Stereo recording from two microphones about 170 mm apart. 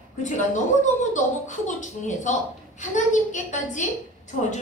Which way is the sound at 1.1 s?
45° left (ahead or behind).